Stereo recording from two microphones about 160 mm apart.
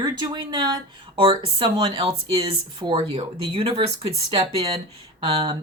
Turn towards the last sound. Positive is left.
turn(degrees=-35)  # may be behind; listen again after turning